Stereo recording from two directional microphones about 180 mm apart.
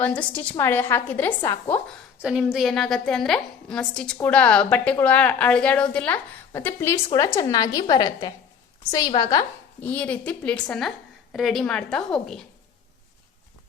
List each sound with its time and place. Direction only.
0.0 s a woman's voice: 10° left (ahead or behind)
2.2 s a woman's voice: 5° right (ahead or behind); by 9.5 s 25° left (ahead or behind)
9.8 s a woman's voice: 10° left (ahead or behind)